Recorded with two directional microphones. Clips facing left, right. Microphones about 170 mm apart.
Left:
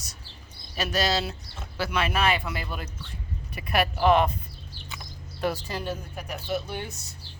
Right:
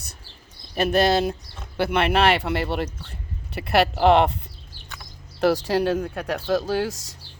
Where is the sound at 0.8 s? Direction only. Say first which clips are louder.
Right 7 dB; 55° right (ahead or behind); by 7.2 s 90° right.